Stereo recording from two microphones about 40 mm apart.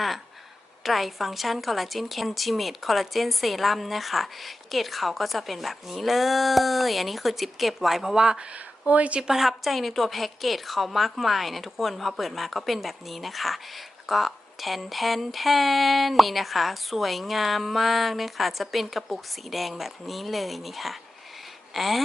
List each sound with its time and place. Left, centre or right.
0.8 s a woman's voice: centre
8.2 s speech: centre
8.9 s speech: right
9.2 s a woman's voice: centre